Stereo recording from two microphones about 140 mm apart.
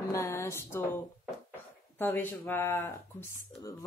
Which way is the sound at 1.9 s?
15° left (ahead or behind).